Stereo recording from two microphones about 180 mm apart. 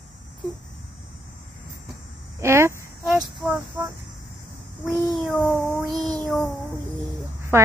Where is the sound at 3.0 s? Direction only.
5° right (ahead or behind).